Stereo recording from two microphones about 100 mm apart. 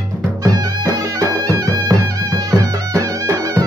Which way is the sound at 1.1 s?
35° right (ahead or behind).